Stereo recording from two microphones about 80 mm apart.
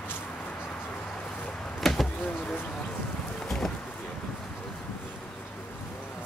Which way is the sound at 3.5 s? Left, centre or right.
Centre.